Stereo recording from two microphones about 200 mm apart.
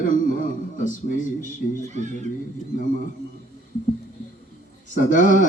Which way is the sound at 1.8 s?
35° right (ahead or behind).